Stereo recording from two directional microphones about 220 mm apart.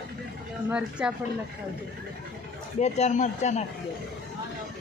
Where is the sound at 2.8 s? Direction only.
30° left (ahead or behind).